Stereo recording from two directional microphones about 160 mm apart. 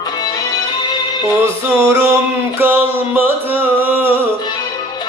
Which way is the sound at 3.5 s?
10° right (ahead or behind).